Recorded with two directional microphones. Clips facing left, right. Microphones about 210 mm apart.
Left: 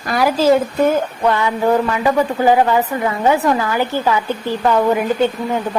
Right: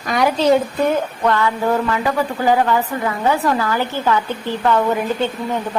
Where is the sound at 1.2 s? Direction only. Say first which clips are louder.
Left 2 dB; 15° left (ahead or behind).